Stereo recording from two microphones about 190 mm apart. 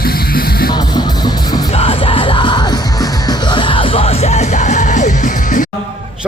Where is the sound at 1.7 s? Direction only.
30° left (ahead or behind).